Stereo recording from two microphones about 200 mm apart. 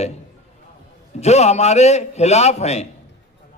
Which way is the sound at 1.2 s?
35° left (ahead or behind).